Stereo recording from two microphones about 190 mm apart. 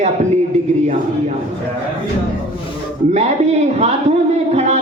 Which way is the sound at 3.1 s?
35° right (ahead or behind).